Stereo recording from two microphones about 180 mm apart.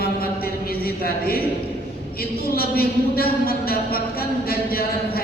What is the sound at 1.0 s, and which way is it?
Speech, 55° left (ahead or behind).